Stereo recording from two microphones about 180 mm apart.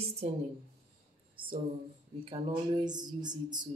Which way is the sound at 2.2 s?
30° right (ahead or behind).